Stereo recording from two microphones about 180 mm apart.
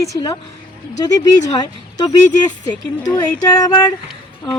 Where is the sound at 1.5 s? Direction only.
25° left (ahead or behind).